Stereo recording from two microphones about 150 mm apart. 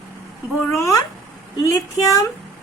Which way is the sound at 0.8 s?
20° left (ahead or behind).